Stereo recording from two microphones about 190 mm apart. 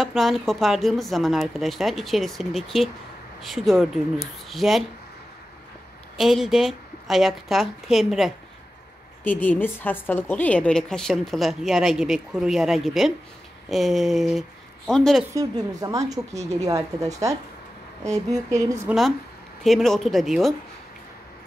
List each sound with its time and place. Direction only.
0.0 s a woman's voice: centre (ahead or behind)
6.1 s a woman's voice: centre (ahead or behind)
9.2 s a woman's voice: 10° left (ahead or behind)
15.3 s speech: 20° right (ahead or behind)
19.6 s a woman's voice: centre (ahead or behind)